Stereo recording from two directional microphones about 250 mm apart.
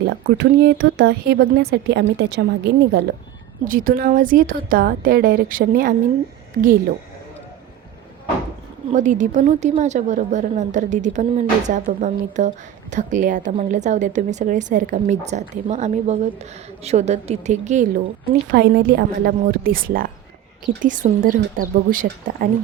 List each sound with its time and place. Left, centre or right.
0.0 s a woman's voice: right
8.9 s a woman's voice: right